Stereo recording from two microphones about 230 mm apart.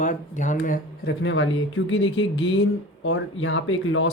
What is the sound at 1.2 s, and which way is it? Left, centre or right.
Speech, left.